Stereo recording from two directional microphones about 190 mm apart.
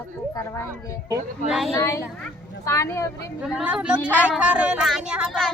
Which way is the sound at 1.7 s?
15° left (ahead or behind).